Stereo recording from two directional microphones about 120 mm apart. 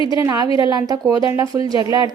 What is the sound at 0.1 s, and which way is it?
Speech, 30° right (ahead or behind).